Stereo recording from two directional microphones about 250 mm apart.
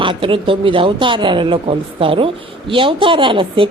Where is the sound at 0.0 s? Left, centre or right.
Right.